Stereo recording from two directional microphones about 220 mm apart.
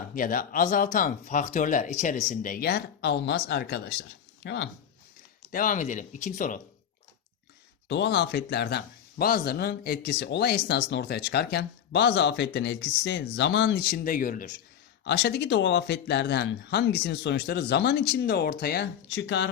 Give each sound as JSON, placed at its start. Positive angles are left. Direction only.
{"t": 0.1, "sound": "speech", "side_deg": 40}
{"t": 5.5, "sound": "speech", "side_deg": 40}
{"t": 7.9, "sound": "speech", "side_deg": 55}